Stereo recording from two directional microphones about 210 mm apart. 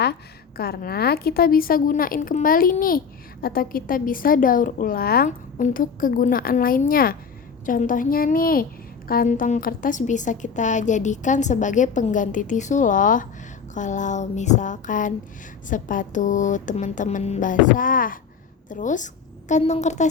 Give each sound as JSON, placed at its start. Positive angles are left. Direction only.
{"t": 0.0, "sound": "a woman's voice", "side_deg": 50}